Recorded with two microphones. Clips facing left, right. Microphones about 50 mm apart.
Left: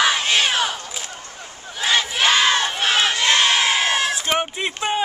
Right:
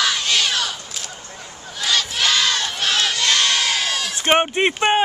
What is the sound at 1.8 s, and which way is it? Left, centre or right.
Crowd, left.